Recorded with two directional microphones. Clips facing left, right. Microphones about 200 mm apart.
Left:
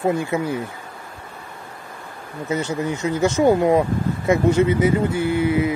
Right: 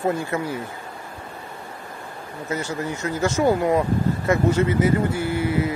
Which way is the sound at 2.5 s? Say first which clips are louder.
Left 4 dB; 20° left (ahead or behind).